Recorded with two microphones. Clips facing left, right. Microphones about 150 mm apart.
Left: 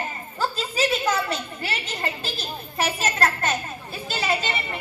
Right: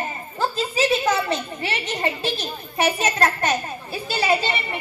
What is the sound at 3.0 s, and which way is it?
Speech, 20° right (ahead or behind).